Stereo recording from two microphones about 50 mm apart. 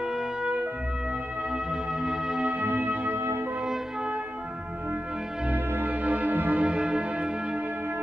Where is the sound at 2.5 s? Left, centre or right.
Right.